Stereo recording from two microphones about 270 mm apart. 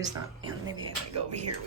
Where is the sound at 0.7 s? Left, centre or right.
Right.